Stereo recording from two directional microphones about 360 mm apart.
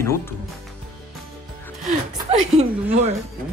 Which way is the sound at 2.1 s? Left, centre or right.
Centre.